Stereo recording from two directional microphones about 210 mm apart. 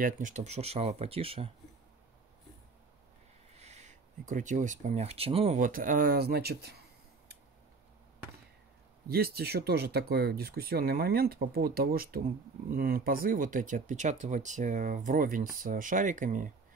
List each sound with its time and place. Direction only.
0.0 s speech: 35° right (ahead or behind)
3.5 s speech: 30° right (ahead or behind); by 6.8 s 50° right (ahead or behind)
9.1 s speech: 45° right (ahead or behind)